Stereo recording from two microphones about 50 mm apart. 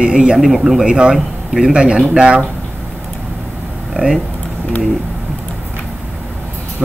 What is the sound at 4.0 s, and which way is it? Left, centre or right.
Speech, right.